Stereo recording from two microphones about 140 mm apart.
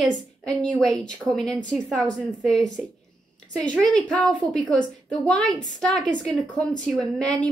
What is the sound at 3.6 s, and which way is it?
A woman's voice, 10° left (ahead or behind).